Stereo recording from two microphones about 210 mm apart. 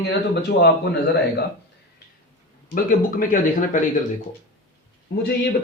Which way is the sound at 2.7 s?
40° left (ahead or behind).